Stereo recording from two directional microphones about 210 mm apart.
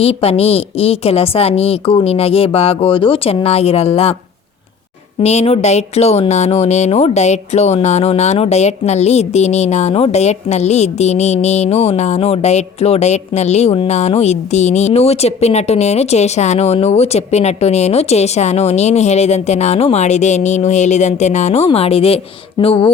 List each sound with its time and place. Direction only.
0.0 s a woman's voice: 30° left (ahead or behind)
5.2 s speech: 30° left (ahead or behind)